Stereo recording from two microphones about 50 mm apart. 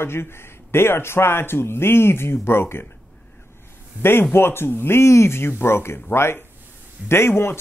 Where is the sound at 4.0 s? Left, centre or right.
Left.